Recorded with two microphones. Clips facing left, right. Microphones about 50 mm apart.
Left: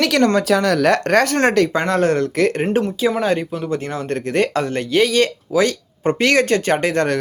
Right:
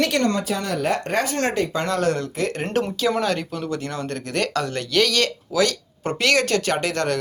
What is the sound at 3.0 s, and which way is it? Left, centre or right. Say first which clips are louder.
Speech: left 3 dB; centre.